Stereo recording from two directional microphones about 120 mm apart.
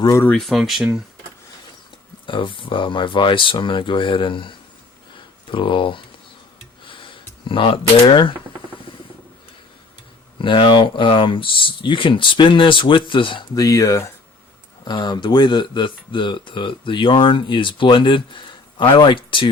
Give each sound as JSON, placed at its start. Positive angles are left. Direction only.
{"t": 0.3, "sound": "speech", "side_deg": 0}
{"t": 2.2, "sound": "speech", "side_deg": 45}
{"t": 6.8, "sound": "a sound", "side_deg": 45}
{"t": 10.3, "sound": "speech", "side_deg": 45}
{"t": 13.6, "sound": "speech", "side_deg": 30}
{"t": 14.8, "sound": "speech", "side_deg": 40}